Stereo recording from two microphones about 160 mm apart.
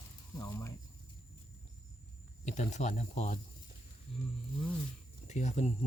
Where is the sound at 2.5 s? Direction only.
50° left (ahead or behind).